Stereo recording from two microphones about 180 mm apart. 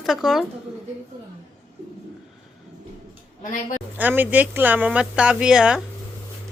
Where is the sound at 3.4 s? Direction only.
45° left (ahead or behind).